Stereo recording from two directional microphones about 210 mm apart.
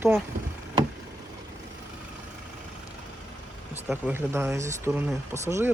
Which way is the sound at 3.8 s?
10° right (ahead or behind).